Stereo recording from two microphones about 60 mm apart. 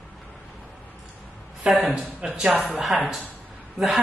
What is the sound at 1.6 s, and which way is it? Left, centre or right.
Speech, centre.